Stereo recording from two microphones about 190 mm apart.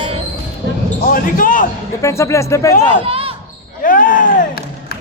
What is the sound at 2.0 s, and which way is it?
Speech, 15° left (ahead or behind).